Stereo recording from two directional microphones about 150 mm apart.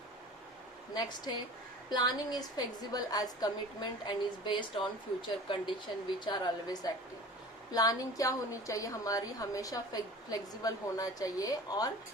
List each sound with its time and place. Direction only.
0.9 s a woman's voice: 25° left (ahead or behind)